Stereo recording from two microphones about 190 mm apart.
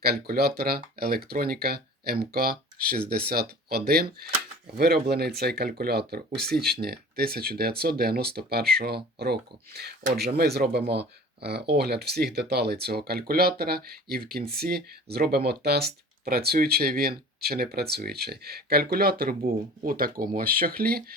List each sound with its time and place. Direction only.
0.0 s speech: 55° right (ahead or behind)